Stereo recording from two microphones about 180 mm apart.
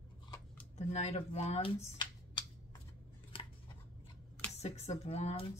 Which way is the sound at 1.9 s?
25° left (ahead or behind).